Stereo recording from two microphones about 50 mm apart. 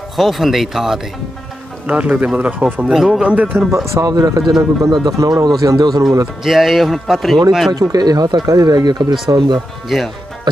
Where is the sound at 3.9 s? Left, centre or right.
Right.